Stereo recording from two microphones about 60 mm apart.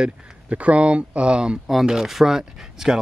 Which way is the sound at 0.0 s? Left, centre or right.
Right.